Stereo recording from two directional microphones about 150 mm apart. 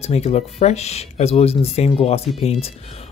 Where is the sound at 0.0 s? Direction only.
45° left (ahead or behind).